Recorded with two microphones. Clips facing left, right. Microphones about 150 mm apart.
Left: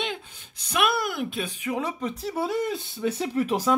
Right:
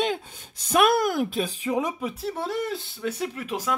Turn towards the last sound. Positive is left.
turn(degrees=35)  # may be behind; listen again after turning